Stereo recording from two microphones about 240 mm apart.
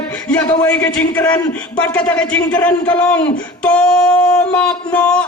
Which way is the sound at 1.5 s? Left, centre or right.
Centre.